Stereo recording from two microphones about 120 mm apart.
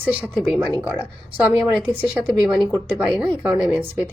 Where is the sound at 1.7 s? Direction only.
15° right (ahead or behind).